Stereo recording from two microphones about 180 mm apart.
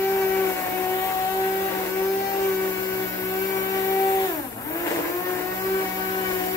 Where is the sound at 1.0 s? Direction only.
15° left (ahead or behind).